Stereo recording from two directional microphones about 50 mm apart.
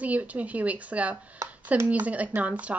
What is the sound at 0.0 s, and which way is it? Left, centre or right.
Speech, right.